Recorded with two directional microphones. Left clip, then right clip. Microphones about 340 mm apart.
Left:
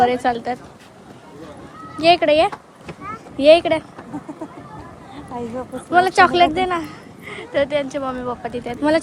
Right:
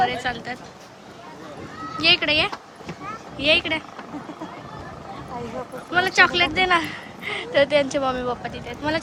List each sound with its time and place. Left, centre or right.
0.0 s a woman's voice: centre
2.0 s a woman's voice: centre
5.9 s speech: centre
8.5 s a woman's voice: centre